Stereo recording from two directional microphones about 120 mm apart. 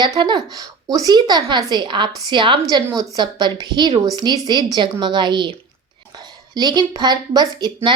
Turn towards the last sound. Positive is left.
turn(degrees=-40)  # may be behind; listen again after turning